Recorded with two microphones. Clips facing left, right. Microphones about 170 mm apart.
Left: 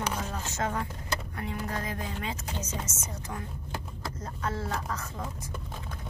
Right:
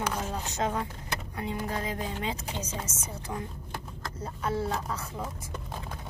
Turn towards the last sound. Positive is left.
turn(degrees=-10)  # may be behind; listen again after turning